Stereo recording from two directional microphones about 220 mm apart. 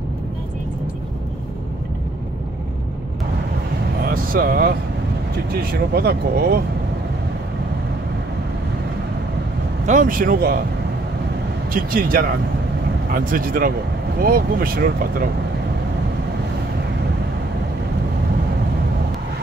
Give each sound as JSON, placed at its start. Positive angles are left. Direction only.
{"t": 4.0, "sound": "vehicle", "side_deg": -40}
{"t": 5.5, "sound": "speech", "side_deg": -45}
{"t": 9.8, "sound": "speech", "side_deg": -35}
{"t": 11.7, "sound": "speech", "side_deg": -40}